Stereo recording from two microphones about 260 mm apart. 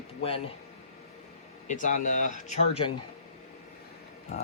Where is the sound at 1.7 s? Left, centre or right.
Left.